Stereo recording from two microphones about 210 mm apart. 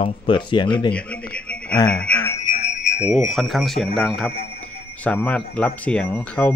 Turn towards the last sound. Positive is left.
turn(degrees=5)  # may be behind; listen again after turning